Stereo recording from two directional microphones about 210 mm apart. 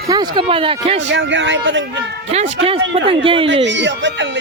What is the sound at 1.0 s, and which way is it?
A man's voice, 60° right (ahead or behind).